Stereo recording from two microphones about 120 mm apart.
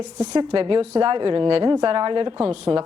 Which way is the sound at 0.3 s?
40° right (ahead or behind).